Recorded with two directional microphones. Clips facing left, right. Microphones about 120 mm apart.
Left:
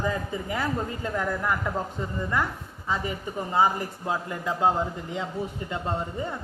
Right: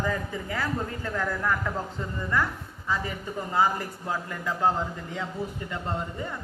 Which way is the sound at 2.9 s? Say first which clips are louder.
Left 1 dB; 20° left (ahead or behind).